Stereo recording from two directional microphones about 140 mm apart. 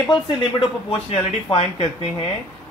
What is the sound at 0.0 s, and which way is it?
Speech, 35° left (ahead or behind).